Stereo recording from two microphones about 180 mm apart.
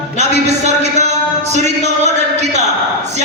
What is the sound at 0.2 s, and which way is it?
A man's voice, 40° right (ahead or behind).